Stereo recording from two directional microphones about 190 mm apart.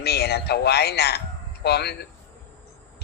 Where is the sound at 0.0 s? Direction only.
60° left (ahead or behind).